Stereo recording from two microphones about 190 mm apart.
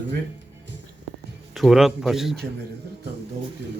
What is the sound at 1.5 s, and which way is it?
Speech, centre (ahead or behind).